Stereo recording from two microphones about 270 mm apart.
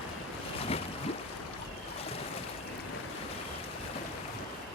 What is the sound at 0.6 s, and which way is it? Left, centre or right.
Boat, left.